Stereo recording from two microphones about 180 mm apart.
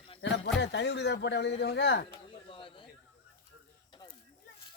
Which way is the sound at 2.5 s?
30° left (ahead or behind).